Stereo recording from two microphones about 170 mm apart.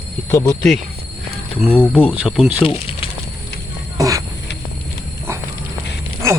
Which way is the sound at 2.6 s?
30° left (ahead or behind).